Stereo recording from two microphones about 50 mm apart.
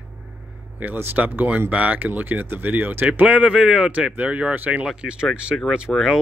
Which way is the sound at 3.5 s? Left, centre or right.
Centre.